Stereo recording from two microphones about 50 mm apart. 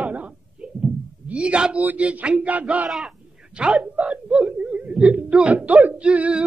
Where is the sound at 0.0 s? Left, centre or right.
Right.